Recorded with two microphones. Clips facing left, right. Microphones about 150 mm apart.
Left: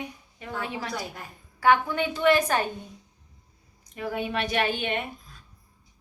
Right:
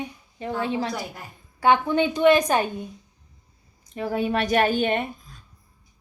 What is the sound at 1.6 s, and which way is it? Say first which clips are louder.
A woman's voice: right 3 dB; 20° right (ahead or behind).